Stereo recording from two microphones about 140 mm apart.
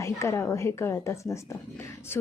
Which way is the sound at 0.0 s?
20° left (ahead or behind).